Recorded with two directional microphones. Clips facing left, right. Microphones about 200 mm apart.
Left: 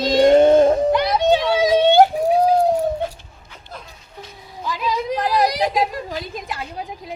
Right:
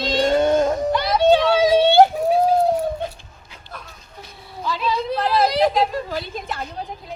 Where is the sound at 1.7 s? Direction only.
15° left (ahead or behind).